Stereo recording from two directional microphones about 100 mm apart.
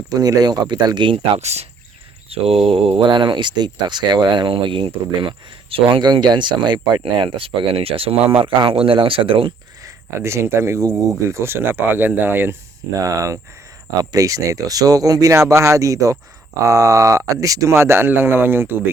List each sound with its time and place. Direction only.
0.1 s speech: 40° right (ahead or behind)
1.1 s speech: 85° right
2.3 s speech: 75° right (ahead or behind)
10.2 s speech: 25° right (ahead or behind)
13.0 s speech: 35° right (ahead or behind)